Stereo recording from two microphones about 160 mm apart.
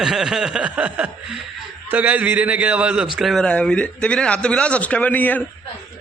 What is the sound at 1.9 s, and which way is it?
A man's voice, 10° right (ahead or behind).